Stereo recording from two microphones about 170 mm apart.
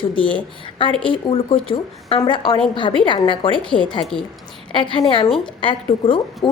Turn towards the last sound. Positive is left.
turn(degrees=30)  # may be behind; listen again after turning